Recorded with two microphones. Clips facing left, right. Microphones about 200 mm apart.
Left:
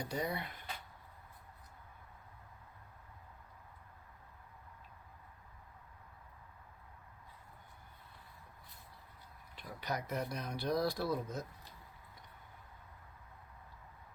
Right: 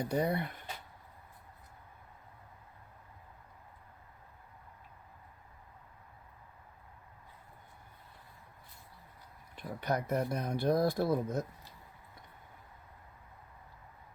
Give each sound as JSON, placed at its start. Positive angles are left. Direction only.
{"t": 0.1, "sound": "speech", "side_deg": -55}
{"t": 9.6, "sound": "speech", "side_deg": -55}